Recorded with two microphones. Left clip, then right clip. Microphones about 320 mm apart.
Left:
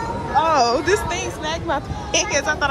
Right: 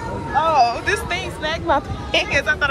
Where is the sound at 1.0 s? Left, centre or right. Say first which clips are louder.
Right 1 dB; centre.